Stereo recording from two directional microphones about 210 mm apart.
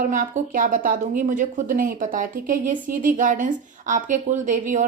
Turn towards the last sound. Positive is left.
turn(degrees=-35)  # may be behind; listen again after turning